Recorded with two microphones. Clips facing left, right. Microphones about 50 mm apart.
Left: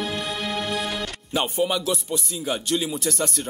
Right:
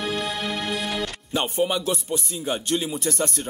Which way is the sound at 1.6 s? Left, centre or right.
Centre.